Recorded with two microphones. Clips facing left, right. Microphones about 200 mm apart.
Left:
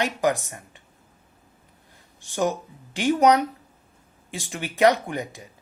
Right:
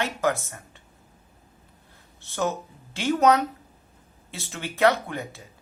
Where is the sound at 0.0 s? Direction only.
15° left (ahead or behind).